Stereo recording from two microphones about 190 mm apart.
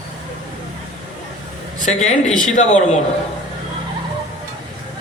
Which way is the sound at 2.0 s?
40° left (ahead or behind).